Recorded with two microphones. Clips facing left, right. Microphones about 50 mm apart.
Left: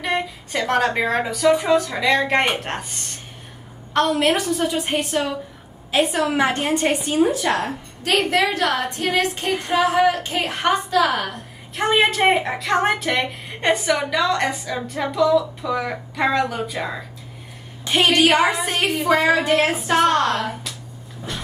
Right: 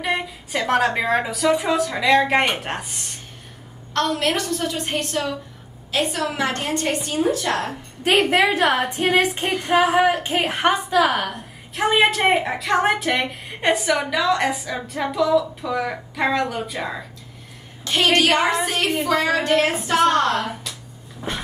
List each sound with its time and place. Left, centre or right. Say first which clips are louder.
0.0 s a woman's voice: left 1 dB; centre
3.9 s a woman's voice: left 3 dB; centre
8.0 s a woman's voice: right 2 dB; right
11.7 s a woman's voice: even; centre
18.0 s speech: left 1 dB; centre
21.3 s a sound: right 3 dB; right